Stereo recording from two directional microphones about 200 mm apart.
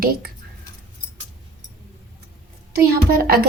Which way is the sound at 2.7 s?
50° right (ahead or behind).